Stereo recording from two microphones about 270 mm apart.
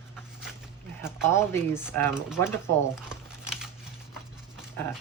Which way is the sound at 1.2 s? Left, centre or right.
Centre.